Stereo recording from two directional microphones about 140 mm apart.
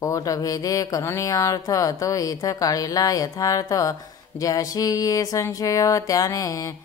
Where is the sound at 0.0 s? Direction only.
25° left (ahead or behind).